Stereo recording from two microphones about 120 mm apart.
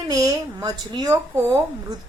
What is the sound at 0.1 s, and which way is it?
A woman's voice, 30° right (ahead or behind).